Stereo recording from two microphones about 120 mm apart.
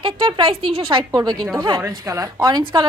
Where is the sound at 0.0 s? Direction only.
45° right (ahead or behind).